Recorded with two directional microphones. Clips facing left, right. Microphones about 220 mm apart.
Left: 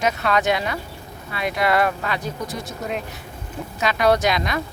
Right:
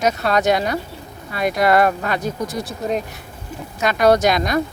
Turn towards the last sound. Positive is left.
turn(degrees=-45)  # may be behind; listen again after turning